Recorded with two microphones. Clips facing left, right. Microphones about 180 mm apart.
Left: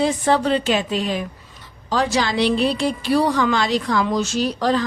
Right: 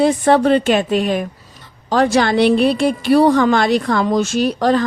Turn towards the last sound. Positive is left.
turn(degrees=-55)  # may be behind; listen again after turning